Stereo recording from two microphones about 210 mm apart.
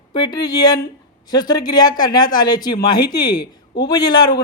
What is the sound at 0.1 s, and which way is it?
Speech, 20° left (ahead or behind).